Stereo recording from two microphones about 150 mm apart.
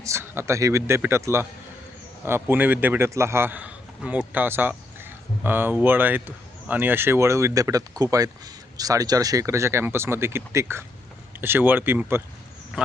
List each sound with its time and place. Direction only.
0.0 s speech: 20° right (ahead or behind)